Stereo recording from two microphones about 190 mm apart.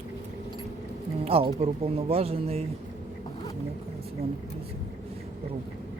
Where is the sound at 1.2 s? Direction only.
30° right (ahead or behind).